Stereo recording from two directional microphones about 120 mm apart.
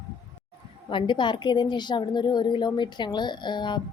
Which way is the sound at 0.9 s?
45° left (ahead or behind).